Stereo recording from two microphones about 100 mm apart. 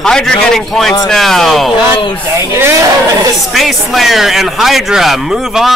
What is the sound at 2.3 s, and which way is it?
Speech, 25° right (ahead or behind).